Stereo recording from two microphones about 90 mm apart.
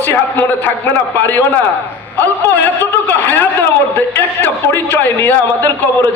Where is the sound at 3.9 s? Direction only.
20° left (ahead or behind).